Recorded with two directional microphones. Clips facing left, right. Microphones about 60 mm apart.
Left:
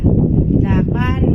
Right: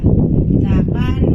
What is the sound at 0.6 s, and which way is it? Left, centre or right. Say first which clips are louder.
Speech: even; left.